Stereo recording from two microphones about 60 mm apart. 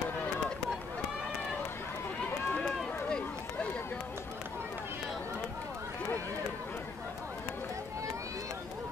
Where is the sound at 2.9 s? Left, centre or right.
Centre.